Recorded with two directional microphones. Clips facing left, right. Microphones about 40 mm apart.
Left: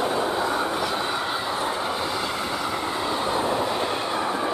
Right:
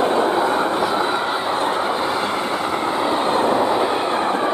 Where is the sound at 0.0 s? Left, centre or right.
Right.